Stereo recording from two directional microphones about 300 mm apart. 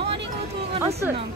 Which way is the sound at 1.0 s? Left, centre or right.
Centre.